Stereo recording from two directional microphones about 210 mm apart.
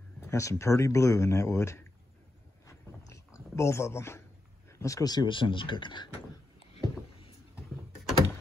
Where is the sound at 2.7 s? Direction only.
15° left (ahead or behind).